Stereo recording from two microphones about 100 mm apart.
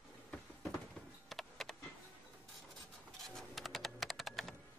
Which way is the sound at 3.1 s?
5° left (ahead or behind).